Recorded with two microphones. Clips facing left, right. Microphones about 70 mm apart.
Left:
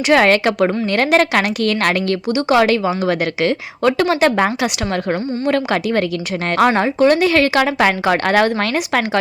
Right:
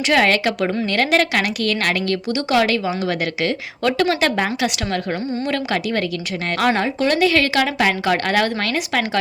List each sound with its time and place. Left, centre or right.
0.1 s speech: left
3.8 s speech: left
5.5 s speech: left